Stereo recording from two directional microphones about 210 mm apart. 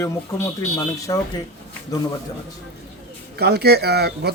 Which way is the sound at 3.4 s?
50° right (ahead or behind).